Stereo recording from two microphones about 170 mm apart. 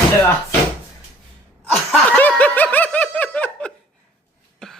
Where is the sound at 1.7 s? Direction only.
5° left (ahead or behind).